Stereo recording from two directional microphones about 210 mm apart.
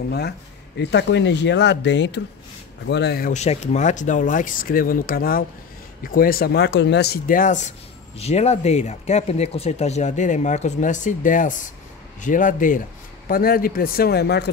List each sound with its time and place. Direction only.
0.7 s speech: 55° left (ahead or behind)